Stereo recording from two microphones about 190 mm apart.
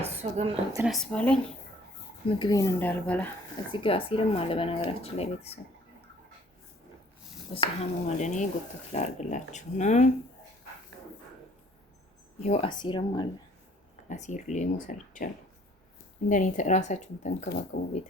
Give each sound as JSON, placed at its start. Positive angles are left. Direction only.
{"t": 0.0, "sound": "a sound", "side_deg": -35}
{"t": 0.9, "sound": "speech", "side_deg": 5}
{"t": 2.4, "sound": "speech", "side_deg": 20}
{"t": 3.7, "sound": "speech", "side_deg": 30}
{"t": 7.5, "sound": "speech", "side_deg": 30}
{"t": 12.4, "sound": "speech", "side_deg": 35}
{"t": 14.1, "sound": "speech", "side_deg": 40}
{"t": 16.3, "sound": "speech", "side_deg": 40}